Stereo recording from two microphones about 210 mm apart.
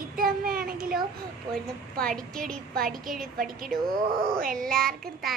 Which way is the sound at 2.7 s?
45° right (ahead or behind).